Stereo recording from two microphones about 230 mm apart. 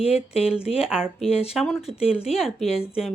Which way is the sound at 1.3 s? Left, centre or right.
Left.